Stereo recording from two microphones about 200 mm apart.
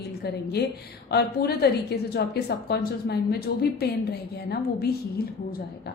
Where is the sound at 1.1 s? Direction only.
50° left (ahead or behind).